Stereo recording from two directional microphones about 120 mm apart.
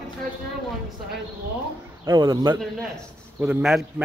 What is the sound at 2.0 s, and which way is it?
Speech, 30° right (ahead or behind).